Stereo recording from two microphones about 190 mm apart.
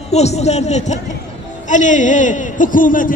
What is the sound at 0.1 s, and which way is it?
A man's voice, 35° left (ahead or behind).